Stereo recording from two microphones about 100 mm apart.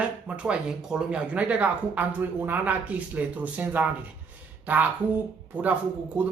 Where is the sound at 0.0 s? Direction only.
10° right (ahead or behind).